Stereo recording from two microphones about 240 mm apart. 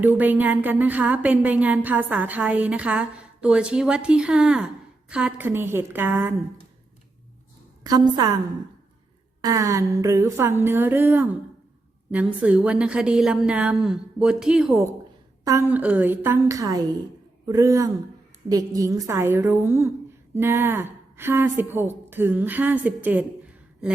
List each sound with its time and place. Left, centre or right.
0.0 s a woman's voice: centre
7.9 s a woman's voice: centre
9.4 s a woman's voice: centre